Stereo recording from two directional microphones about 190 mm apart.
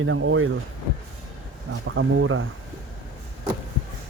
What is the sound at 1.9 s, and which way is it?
Speech, 90° right.